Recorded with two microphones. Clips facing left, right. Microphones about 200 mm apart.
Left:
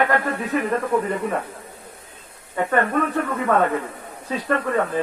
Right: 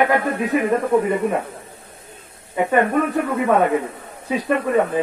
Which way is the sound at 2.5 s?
10° right (ahead or behind).